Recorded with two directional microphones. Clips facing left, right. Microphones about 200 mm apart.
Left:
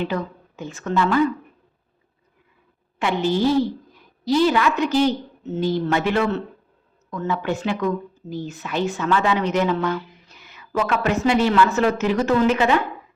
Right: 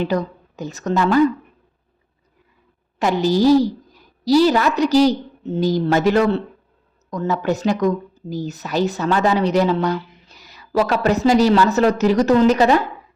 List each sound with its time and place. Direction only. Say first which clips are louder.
0.0 s speech: right 4 dB; 40° right (ahead or behind)
3.0 s speech: right 4 dB; 40° right (ahead or behind)